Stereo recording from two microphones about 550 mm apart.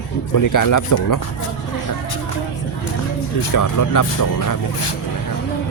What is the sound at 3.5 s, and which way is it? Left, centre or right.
Speech, left.